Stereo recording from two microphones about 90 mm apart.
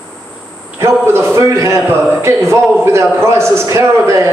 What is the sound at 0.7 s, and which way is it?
A man's voice, 30° right (ahead or behind).